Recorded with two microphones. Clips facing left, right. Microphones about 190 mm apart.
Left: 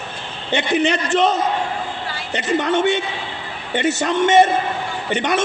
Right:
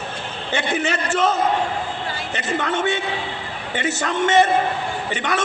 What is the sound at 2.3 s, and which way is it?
Speech, 20° left (ahead or behind).